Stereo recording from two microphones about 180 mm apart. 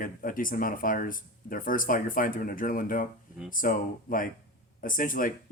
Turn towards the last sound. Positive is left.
turn(degrees=50)  # may be behind; listen again after turning